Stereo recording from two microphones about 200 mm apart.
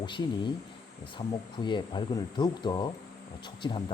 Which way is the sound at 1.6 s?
25° left (ahead or behind).